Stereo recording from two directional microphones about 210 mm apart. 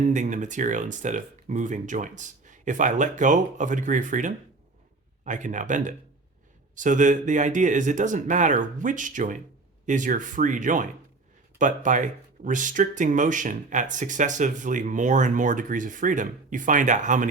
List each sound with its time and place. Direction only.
0.0 s speech: 35° right (ahead or behind)